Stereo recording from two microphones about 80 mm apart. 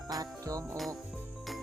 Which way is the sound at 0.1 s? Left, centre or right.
Right.